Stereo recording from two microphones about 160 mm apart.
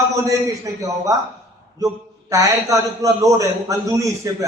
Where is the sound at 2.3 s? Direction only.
20° right (ahead or behind).